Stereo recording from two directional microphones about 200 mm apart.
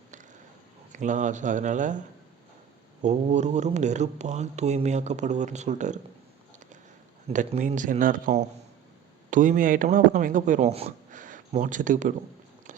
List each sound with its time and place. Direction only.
0.9 s speech: 40° right (ahead or behind)
3.0 s speech: 35° right (ahead or behind)
7.3 s speech: 35° right (ahead or behind)